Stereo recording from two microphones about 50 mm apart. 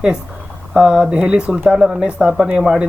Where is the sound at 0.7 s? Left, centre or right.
Centre.